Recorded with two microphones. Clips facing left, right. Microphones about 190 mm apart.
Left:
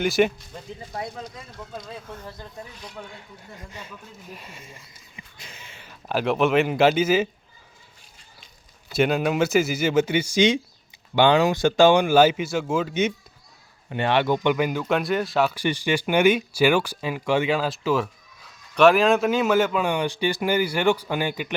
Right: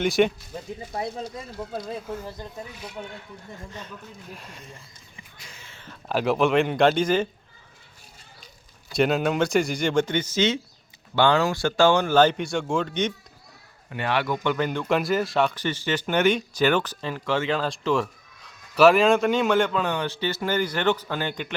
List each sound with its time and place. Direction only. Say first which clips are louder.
0.0 s speech: even; centre (ahead or behind)
0.9 s speech: right 3 dB; 25° right (ahead or behind)
2.0 s speech: right 5 dB; 10° right (ahead or behind)
3.7 s speech: right 2 dB; 10° left (ahead or behind)
5.5 s a sound: even; 20° left (ahead or behind)
6.1 s speech: even; centre (ahead or behind)
8.9 s speech: left 1 dB; centre (ahead or behind)
13.9 s a man's voice: left 4 dB; 25° left (ahead or behind)
14.4 s speech: left 2 dB; 10° left (ahead or behind)